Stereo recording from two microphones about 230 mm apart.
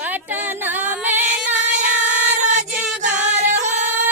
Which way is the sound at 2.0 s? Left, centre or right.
Centre.